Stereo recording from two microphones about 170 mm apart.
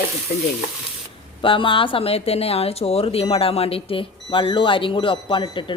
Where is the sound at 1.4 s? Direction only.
30° left (ahead or behind).